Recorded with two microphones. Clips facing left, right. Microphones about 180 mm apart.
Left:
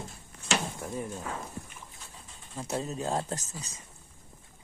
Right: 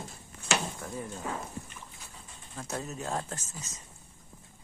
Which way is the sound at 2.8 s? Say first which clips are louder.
Left 3 dB; 30° left (ahead or behind).